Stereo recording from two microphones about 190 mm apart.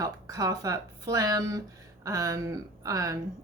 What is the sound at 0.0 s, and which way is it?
A woman's voice, 20° right (ahead or behind).